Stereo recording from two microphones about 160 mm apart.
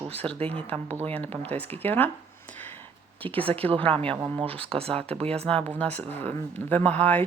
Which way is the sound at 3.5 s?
35° right (ahead or behind).